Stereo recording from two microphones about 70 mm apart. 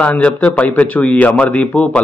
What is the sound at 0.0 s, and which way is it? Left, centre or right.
A man's voice, left.